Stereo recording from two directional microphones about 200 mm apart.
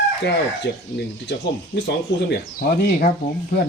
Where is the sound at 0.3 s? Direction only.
60° left (ahead or behind).